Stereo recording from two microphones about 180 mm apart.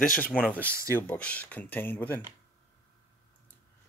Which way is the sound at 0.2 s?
10° left (ahead or behind).